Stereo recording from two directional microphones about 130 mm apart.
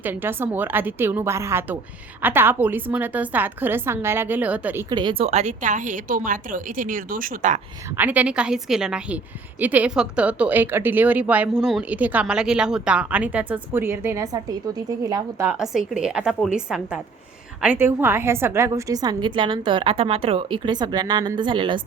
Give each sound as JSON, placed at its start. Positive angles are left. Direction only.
{"t": 0.0, "sound": "speech", "side_deg": -15}
{"t": 4.9, "sound": "a woman's voice", "side_deg": -35}
{"t": 7.9, "sound": "a woman's voice", "side_deg": -10}
{"t": 15.5, "sound": "a woman's voice", "side_deg": -5}